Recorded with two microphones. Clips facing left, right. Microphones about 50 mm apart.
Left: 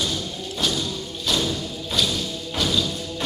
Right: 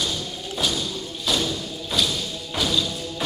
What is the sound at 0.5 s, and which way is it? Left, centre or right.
Thump, centre.